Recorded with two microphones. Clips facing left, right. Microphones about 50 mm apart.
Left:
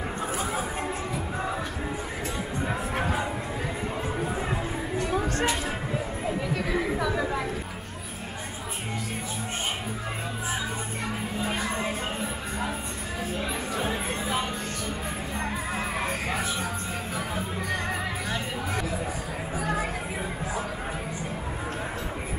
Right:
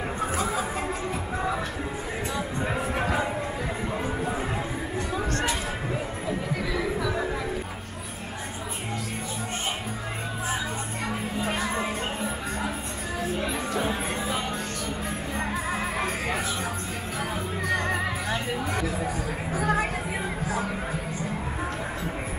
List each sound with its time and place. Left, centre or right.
6.2 s chatter: left
11.1 s music: centre
13.2 s music: centre
15.5 s music: centre
17.6 s music: centre
19.5 s chatter: right